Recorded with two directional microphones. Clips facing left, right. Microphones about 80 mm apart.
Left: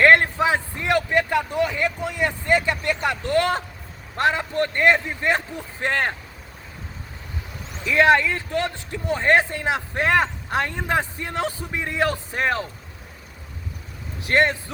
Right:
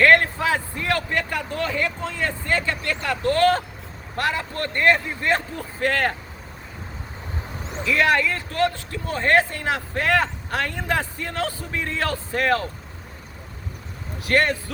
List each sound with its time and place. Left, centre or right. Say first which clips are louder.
0.0 s a man's voice: left 1 dB; left
7.9 s speech: left 3 dB; left
14.3 s speech: left 1 dB; left